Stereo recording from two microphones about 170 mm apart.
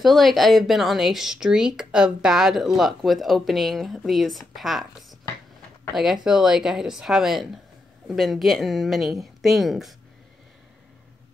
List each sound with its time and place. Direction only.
0.0 s speech: centre (ahead or behind)
6.2 s speech: 5° right (ahead or behind)